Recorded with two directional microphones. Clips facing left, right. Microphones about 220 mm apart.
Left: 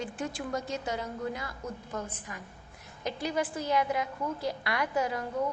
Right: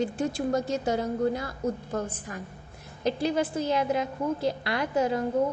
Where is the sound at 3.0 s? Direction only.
30° right (ahead or behind).